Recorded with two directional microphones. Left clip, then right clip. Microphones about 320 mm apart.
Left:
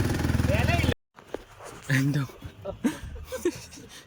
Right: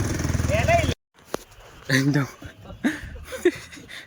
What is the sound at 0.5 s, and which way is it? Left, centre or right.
Vehicle, centre.